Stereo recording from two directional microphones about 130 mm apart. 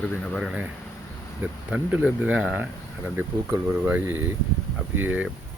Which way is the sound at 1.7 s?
10° right (ahead or behind).